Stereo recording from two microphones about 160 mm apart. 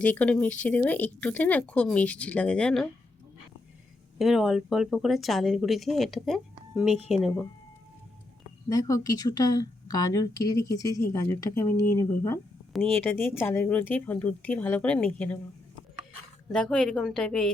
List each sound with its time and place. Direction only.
0.0 s speech: 10° left (ahead or behind)
4.2 s speech: 5° right (ahead or behind)
8.7 s a woman's voice: 25° left (ahead or behind)
16.5 s speech: 5° left (ahead or behind)